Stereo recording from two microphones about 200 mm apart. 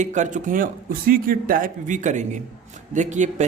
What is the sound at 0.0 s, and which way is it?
Speech, 35° right (ahead or behind).